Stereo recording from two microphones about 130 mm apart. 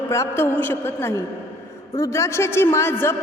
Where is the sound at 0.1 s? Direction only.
20° left (ahead or behind).